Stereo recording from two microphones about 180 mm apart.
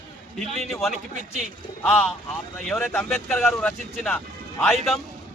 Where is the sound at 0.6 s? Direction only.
Centre (ahead or behind).